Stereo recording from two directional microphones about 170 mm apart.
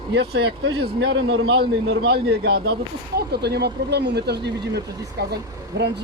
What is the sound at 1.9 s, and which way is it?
Speech, 75° right (ahead or behind).